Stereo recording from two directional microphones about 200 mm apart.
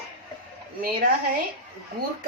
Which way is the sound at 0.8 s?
50° right (ahead or behind).